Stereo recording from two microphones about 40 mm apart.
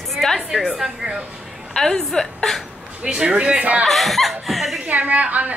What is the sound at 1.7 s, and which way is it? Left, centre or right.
Speech, centre.